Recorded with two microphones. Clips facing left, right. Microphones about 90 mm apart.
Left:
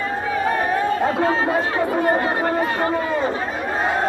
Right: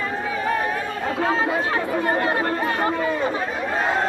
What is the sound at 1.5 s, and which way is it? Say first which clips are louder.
Speech: left 3 dB; 30° left (ahead or behind).